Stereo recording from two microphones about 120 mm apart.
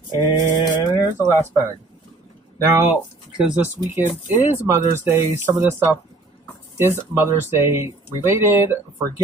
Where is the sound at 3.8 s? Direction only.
35° left (ahead or behind).